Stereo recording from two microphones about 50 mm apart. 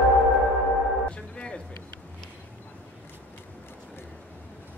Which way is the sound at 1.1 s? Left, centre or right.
Left.